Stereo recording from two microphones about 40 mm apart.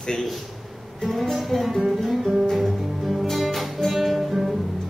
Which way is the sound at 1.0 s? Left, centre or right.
Centre.